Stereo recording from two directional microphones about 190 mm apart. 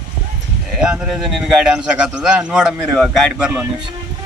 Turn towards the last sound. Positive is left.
turn(degrees=-5)  # may be behind; listen again after turning